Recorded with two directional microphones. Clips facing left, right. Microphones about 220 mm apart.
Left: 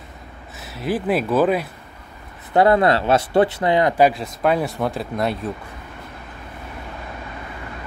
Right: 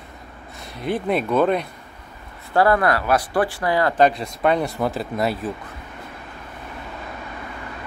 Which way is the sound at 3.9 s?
5° left (ahead or behind).